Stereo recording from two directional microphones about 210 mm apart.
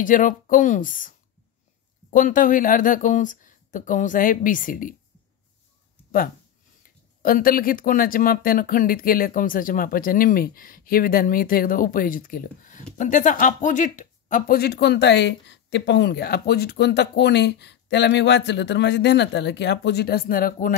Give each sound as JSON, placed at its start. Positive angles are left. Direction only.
{"t": 0.0, "sound": "speech", "side_deg": 40}
{"t": 7.2, "sound": "speech", "side_deg": 45}